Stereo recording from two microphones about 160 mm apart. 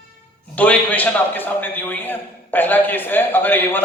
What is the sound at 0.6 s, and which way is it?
A man's voice, 10° left (ahead or behind).